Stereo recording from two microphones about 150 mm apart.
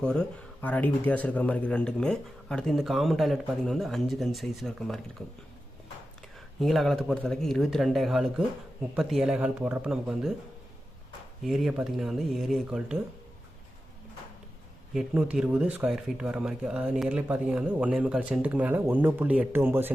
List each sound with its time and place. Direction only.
0.0 s speech: 5° left (ahead or behind)
6.6 s speech: centre (ahead or behind)
11.4 s speech: centre (ahead or behind)
14.9 s speech: 5° right (ahead or behind)